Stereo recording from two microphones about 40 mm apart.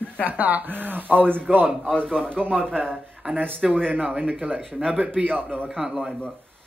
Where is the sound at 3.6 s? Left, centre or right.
Centre.